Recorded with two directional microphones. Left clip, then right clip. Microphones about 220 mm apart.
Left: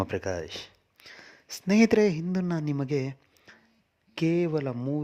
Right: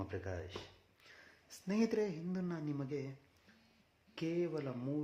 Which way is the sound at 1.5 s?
45° left (ahead or behind).